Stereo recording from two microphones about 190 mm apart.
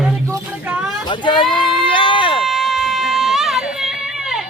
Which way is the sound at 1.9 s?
25° left (ahead or behind).